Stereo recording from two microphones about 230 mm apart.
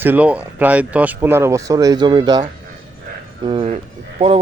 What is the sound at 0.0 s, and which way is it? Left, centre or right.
Speech, centre.